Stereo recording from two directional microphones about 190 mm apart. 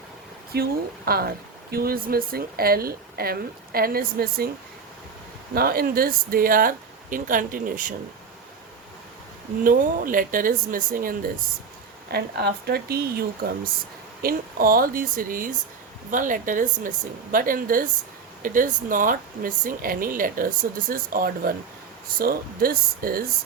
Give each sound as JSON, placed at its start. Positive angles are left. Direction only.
{"t": 0.5, "sound": "speech", "side_deg": -55}
{"t": 5.5, "sound": "speech", "side_deg": -50}
{"t": 9.6, "sound": "speech", "side_deg": -45}